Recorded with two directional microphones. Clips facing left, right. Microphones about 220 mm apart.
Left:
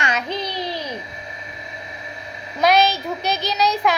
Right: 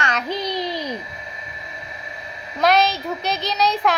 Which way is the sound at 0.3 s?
15° right (ahead or behind).